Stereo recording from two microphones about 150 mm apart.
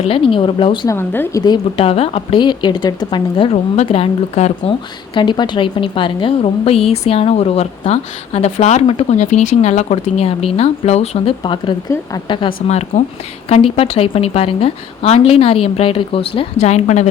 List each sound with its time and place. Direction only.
0.1 s a woman's voice: 35° left (ahead or behind)
0.9 s speech: 15° left (ahead or behind)
1.4 s speech: 30° left (ahead or behind)
1.8 s a woman's voice: 40° left (ahead or behind)
5.1 s a woman's voice: 30° left (ahead or behind)
12.9 s a woman's voice: 50° left (ahead or behind)
13.5 s a woman's voice: 40° left (ahead or behind)